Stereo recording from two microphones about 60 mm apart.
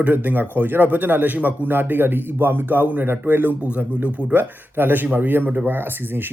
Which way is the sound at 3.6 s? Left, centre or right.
Right.